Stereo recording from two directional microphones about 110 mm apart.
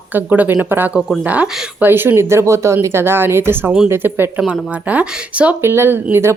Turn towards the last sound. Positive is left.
turn(degrees=-20)  # may be behind; listen again after turning